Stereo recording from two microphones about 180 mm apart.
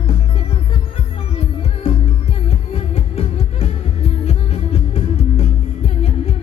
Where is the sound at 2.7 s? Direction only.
35° left (ahead or behind).